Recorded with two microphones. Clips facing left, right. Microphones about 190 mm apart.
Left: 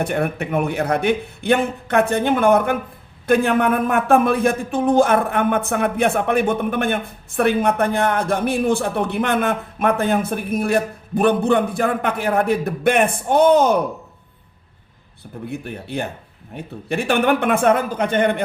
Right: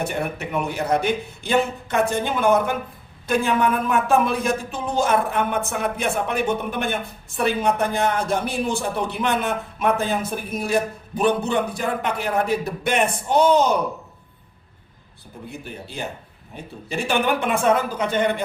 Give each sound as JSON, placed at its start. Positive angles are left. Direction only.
{"t": 0.0, "sound": "a man's voice", "side_deg": 55}
{"t": 15.4, "sound": "a man's voice", "side_deg": 60}